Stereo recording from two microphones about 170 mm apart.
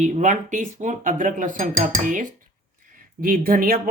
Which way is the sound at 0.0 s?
45° right (ahead or behind).